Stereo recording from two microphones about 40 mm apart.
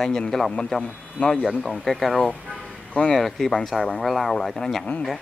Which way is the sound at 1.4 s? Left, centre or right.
Centre.